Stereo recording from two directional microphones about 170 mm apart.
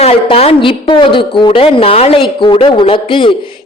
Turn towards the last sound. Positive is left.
turn(degrees=30)  # may be behind; listen again after turning